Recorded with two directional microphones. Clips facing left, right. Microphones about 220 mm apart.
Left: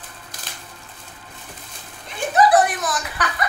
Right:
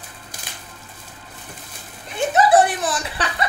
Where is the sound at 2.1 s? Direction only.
25° right (ahead or behind).